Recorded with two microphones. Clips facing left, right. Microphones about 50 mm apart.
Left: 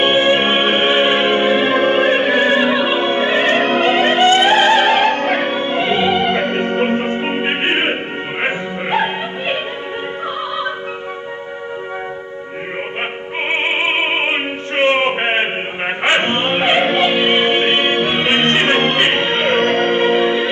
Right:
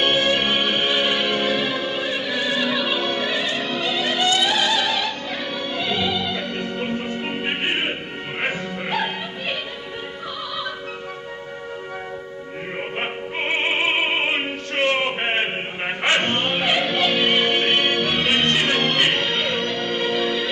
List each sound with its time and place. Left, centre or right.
0.0 s music: left
13.5 s opera: left
16.0 s music: left